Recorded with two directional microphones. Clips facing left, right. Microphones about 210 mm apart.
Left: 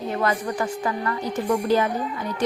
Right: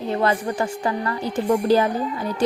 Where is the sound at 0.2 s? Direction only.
30° right (ahead or behind).